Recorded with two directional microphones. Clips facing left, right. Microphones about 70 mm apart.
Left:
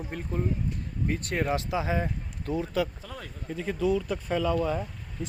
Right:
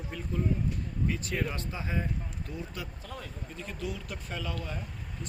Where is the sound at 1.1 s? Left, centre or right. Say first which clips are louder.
Left 7 dB; left.